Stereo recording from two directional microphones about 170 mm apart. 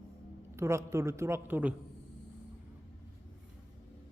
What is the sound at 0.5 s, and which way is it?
Speech, 15° right (ahead or behind).